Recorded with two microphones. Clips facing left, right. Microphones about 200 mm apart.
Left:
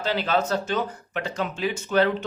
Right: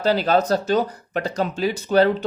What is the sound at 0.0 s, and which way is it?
Speech, 40° right (ahead or behind).